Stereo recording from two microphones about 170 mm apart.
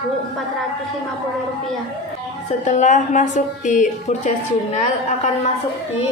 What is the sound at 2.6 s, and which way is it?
A woman's voice, 45° left (ahead or behind).